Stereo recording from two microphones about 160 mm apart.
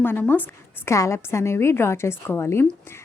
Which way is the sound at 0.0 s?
10° left (ahead or behind).